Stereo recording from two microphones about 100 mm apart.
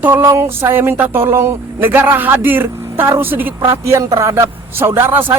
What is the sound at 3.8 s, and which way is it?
Speech, 30° right (ahead or behind).